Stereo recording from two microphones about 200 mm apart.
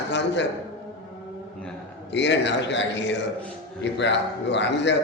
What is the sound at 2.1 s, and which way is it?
A man's voice, 60° left (ahead or behind).